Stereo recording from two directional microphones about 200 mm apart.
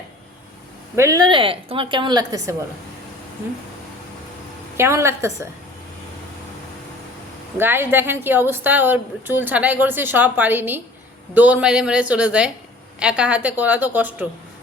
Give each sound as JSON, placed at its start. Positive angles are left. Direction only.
{"t": 0.9, "sound": "a woman's voice", "side_deg": -15}
{"t": 4.8, "sound": "a woman's voice", "side_deg": -15}
{"t": 7.6, "sound": "a woman's voice", "side_deg": -10}